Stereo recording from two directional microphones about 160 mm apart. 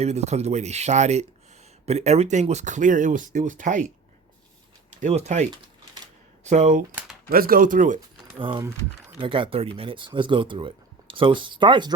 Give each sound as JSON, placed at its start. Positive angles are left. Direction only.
{"t": 0.0, "sound": "speech", "side_deg": -45}
{"t": 4.9, "sound": "speech", "side_deg": -45}
{"t": 7.3, "sound": "speech", "side_deg": -65}
{"t": 8.4, "sound": "speech", "side_deg": -30}